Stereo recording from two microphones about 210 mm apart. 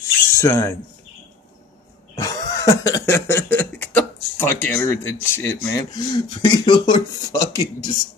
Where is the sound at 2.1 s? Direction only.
15° left (ahead or behind).